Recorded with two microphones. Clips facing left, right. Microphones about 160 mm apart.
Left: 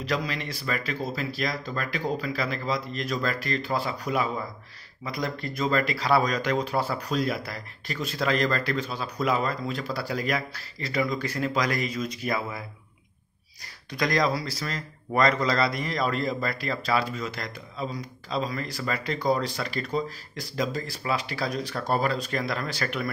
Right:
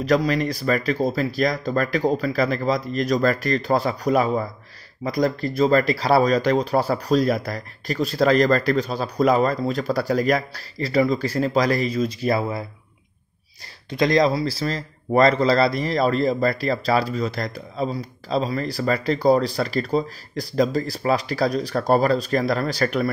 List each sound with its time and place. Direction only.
0.0 s speech: 45° right (ahead or behind)
13.8 s speech: 25° right (ahead or behind)